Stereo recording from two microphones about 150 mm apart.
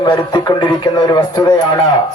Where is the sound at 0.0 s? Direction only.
25° left (ahead or behind).